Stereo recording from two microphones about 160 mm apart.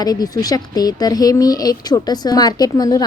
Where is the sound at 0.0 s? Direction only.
25° left (ahead or behind).